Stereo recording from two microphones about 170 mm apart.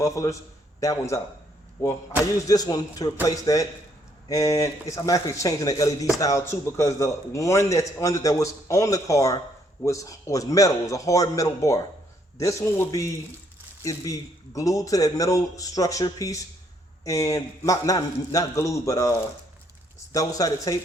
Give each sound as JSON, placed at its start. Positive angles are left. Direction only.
{"t": 0.0, "sound": "a man's voice", "side_deg": 20}
{"t": 2.5, "sound": "a man's voice", "side_deg": 25}